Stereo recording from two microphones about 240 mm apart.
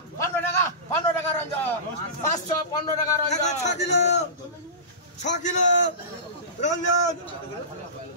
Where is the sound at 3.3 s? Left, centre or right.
Left.